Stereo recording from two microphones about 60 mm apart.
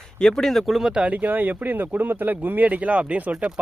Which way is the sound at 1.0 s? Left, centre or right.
Right.